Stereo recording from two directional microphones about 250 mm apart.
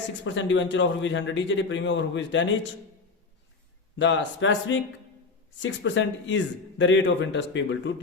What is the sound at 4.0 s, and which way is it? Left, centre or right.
A man's voice, left.